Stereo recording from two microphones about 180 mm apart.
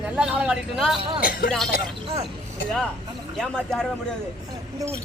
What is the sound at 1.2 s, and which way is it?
Speech, 50° left (ahead or behind).